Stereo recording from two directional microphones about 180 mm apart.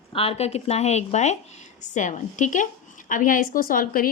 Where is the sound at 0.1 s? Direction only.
30° left (ahead or behind).